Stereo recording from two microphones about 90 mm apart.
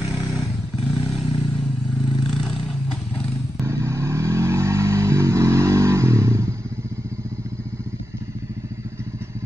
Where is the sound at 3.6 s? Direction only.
30° right (ahead or behind).